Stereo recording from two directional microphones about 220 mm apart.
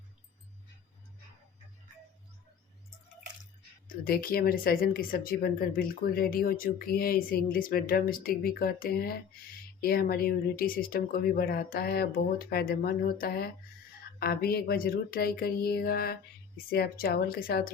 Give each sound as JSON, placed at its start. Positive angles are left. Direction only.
{"t": 3.8, "sound": "speech", "side_deg": 40}